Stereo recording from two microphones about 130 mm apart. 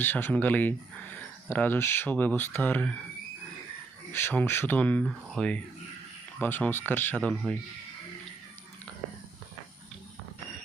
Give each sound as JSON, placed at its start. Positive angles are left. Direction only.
{"t": 0.0, "sound": "speech", "side_deg": 15}
{"t": 4.1, "sound": "speech", "side_deg": 15}